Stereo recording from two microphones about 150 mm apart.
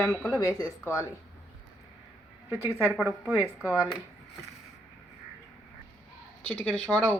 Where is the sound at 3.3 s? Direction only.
15° right (ahead or behind).